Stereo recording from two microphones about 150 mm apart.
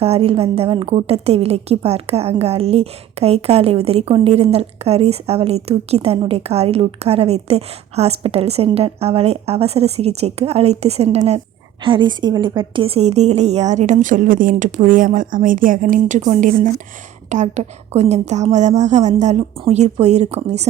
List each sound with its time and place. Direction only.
0.0 s a woman's voice: 45° right (ahead or behind)
11.8 s a woman's voice: 30° right (ahead or behind)